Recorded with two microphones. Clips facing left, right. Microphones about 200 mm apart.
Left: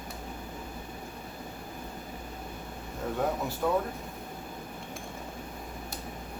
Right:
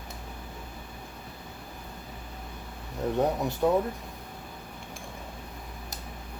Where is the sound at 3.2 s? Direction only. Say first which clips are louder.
Right 4 dB; 20° right (ahead or behind).